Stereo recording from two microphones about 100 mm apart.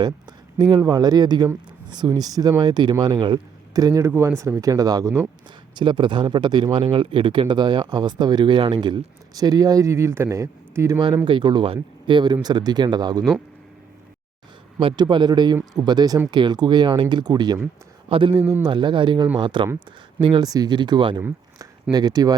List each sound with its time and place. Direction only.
0.9 s speech: 40° right (ahead or behind)
5.7 s speech: 55° right (ahead or behind)
6.8 s speech: 60° right (ahead or behind); by 11.0 s 30° right (ahead or behind)
11.3 s speech: 50° right (ahead or behind)
14.8 s speech: 55° right (ahead or behind)
18.1 s a man's voice: 55° right (ahead or behind)